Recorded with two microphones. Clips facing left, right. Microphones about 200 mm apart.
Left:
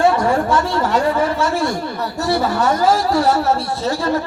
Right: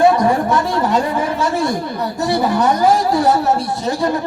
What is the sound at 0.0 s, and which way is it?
Speech, 20° right (ahead or behind).